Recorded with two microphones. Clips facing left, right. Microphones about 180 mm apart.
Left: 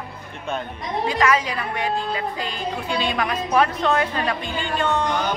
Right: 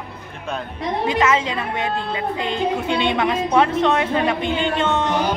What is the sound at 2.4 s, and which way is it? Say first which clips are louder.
A woman's voice: right 6 dB; 25° right (ahead or behind).